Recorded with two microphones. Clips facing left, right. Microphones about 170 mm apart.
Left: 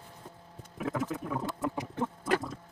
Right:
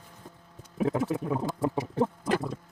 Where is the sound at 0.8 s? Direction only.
30° right (ahead or behind).